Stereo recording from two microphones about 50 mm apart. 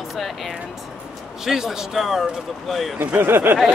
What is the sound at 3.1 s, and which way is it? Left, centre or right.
Speech, right.